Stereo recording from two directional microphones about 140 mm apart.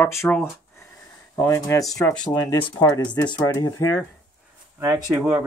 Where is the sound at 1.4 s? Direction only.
20° left (ahead or behind).